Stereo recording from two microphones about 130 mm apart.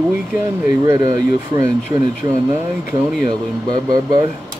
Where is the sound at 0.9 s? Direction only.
30° right (ahead or behind).